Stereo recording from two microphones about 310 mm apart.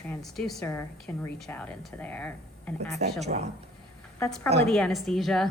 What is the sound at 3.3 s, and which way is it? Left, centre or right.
Speech, right.